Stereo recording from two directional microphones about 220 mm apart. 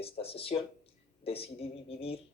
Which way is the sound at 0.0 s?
25° left (ahead or behind).